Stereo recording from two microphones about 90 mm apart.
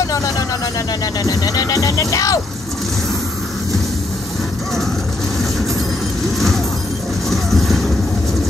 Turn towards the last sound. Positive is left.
turn(degrees=0)  # may be behind; listen again after turning